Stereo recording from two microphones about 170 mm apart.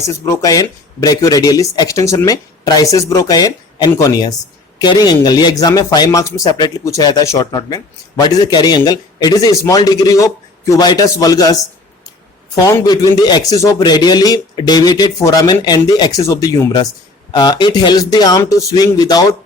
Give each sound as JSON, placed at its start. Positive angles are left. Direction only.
{"t": 0.0, "sound": "speech", "side_deg": 20}
{"t": 12.6, "sound": "speech", "side_deg": 20}